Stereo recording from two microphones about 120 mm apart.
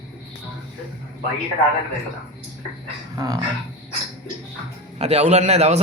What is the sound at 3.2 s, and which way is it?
Speech, 30° right (ahead or behind).